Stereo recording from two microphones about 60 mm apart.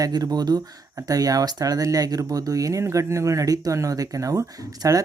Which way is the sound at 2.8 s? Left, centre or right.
Right.